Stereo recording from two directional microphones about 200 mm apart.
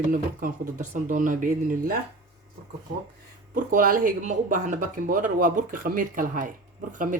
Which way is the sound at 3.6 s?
45° right (ahead or behind).